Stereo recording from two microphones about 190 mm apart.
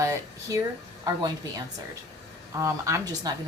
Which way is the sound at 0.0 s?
15° right (ahead or behind).